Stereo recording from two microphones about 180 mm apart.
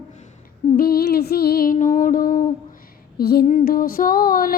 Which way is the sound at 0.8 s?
60° left (ahead or behind).